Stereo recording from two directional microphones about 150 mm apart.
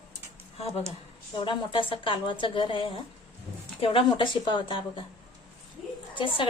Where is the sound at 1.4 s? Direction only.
35° left (ahead or behind).